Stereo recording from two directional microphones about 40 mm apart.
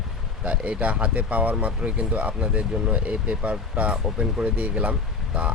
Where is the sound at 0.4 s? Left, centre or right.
Right.